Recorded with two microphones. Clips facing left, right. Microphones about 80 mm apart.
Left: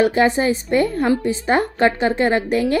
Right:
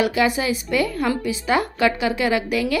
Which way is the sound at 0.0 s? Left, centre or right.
Left.